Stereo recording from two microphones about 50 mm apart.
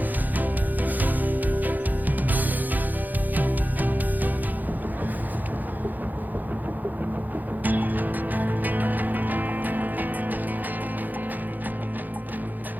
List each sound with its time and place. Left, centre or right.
0.3 s music: right
7.6 s music: right